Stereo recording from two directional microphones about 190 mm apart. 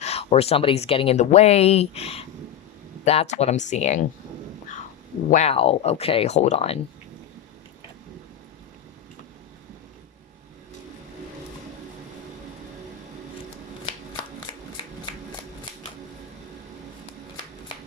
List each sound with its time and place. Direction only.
0.0 s speech: 35° left (ahead or behind)
5.3 s speech: 35° left (ahead or behind)